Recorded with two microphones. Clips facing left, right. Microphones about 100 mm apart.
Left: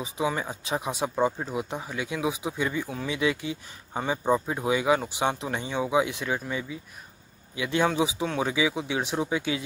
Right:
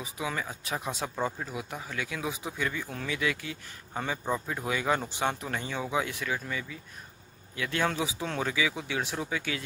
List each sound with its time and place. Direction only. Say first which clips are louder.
0.0 s speech: left 6 dB; 25° left (ahead or behind)
7.5 s speech: left 5 dB; 15° left (ahead or behind)